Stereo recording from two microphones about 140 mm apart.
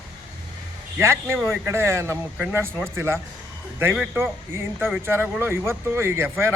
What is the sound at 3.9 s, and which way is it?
Speech, 10° right (ahead or behind).